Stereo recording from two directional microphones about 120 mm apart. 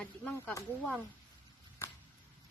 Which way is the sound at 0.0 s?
10° left (ahead or behind).